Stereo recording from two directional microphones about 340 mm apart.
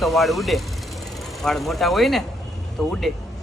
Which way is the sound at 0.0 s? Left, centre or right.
Centre.